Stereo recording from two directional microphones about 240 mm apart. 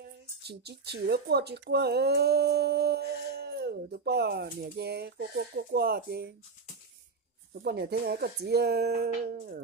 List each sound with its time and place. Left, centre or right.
0.0 s speech: right
7.6 s speech: right